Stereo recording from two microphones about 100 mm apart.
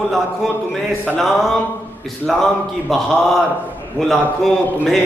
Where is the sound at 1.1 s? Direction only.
Centre (ahead or behind).